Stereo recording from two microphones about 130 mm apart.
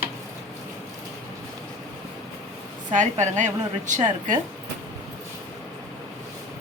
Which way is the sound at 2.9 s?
70° right (ahead or behind).